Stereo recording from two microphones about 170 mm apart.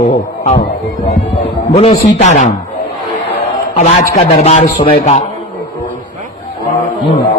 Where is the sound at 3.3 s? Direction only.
40° left (ahead or behind).